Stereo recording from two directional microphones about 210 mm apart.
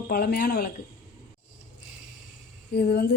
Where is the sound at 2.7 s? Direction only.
50° left (ahead or behind).